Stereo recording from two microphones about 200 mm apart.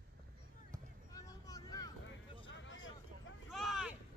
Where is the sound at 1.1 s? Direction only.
20° left (ahead or behind).